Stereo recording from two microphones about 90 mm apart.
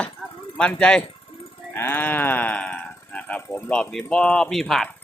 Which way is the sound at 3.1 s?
20° left (ahead or behind).